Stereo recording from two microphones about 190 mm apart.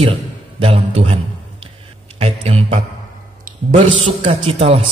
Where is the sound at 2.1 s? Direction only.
30° right (ahead or behind).